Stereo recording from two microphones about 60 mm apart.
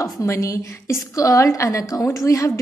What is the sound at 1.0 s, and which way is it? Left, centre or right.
A woman's voice, left.